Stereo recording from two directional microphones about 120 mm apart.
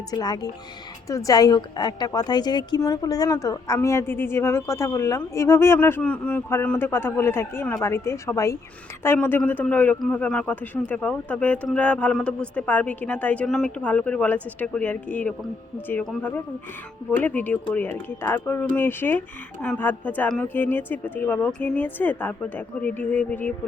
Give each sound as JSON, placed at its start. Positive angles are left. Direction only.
{"t": 0.1, "sound": "a woman's voice", "side_deg": 35}